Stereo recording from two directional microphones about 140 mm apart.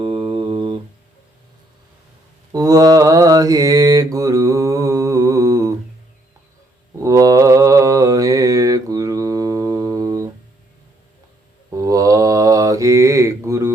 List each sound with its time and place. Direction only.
0.0 s a sound: 40° right (ahead or behind)
2.5 s mantra: 25° right (ahead or behind)
7.0 s mantra: 25° right (ahead or behind)
11.7 s mantra: 25° right (ahead or behind)